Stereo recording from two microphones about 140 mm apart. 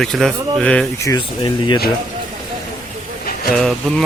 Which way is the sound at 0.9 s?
25° left (ahead or behind).